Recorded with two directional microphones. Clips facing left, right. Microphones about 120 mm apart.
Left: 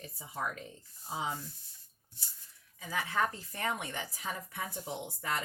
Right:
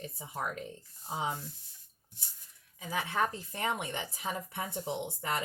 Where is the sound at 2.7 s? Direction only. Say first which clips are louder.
Right 1 dB; 15° right (ahead or behind).